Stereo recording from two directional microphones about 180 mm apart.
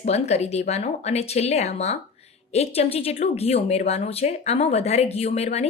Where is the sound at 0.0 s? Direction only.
35° left (ahead or behind).